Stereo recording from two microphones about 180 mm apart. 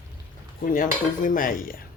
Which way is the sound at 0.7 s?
50° left (ahead or behind).